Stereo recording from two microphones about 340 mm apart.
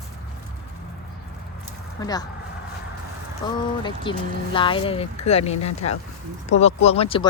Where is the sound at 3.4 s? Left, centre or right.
Centre.